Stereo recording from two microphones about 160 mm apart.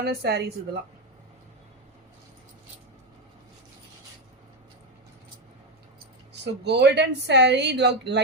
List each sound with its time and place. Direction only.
0.0 s speech: 85° right
6.4 s speech: 90° right